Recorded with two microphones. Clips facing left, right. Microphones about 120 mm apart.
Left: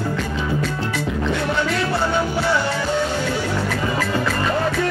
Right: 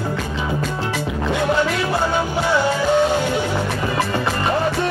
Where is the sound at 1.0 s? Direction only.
20° right (ahead or behind).